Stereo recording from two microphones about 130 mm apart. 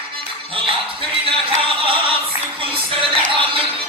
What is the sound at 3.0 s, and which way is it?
Music, 40° right (ahead or behind).